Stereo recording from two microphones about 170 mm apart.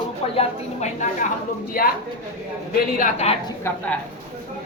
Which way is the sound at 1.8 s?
55° left (ahead or behind).